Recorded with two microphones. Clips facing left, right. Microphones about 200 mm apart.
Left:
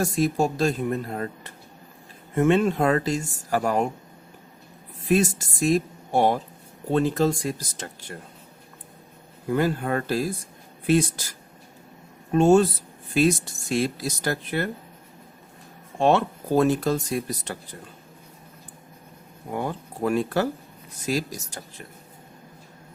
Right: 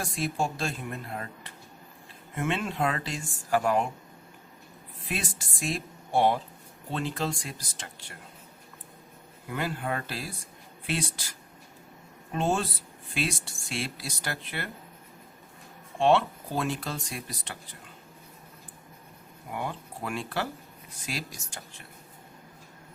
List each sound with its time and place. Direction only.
0.0 s speech: 40° left (ahead or behind)
5.0 s a woman's voice: 45° left (ahead or behind)
9.5 s speech: 40° left (ahead or behind)
16.0 s speech: 45° left (ahead or behind)
19.5 s speech: 40° left (ahead or behind)